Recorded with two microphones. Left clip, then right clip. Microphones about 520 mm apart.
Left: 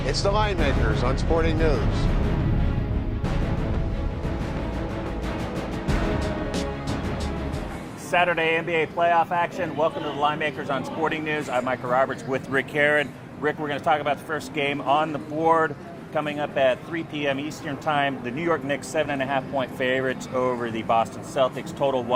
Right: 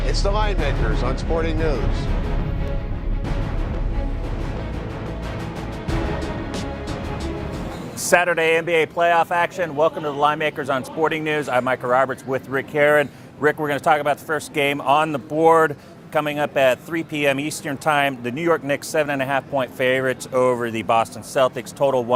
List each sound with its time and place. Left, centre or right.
0.0 s speech: centre
6.1 s music: centre
8.1 s speech: right